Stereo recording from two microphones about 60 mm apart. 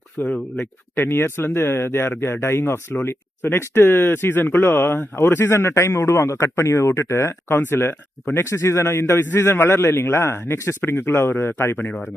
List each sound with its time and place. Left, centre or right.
0.2 s a man's voice: left
5.5 s a man's voice: left
9.1 s a man's voice: left